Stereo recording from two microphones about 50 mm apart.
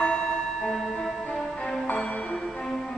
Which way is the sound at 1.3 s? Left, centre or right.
Centre.